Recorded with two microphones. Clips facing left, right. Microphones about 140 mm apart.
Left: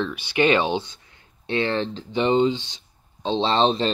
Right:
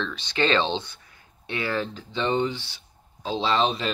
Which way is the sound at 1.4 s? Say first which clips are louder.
Left 5 dB; 25° left (ahead or behind).